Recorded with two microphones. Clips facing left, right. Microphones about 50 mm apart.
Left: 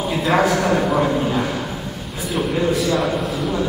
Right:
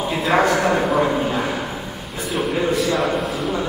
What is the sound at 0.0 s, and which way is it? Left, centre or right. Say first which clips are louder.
A man's voice: even; centre.